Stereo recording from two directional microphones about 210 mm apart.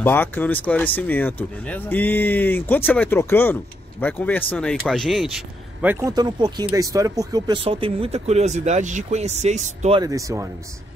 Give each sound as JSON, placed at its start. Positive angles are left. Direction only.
{"t": 0.0, "sound": "speech", "side_deg": 10}
{"t": 6.1, "sound": "speech", "side_deg": -20}
{"t": 9.9, "sound": "speech", "side_deg": -15}